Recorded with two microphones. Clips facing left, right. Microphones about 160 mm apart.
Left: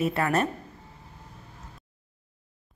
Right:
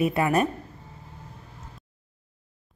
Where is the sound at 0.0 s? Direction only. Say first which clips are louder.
Right 3 dB; 15° right (ahead or behind).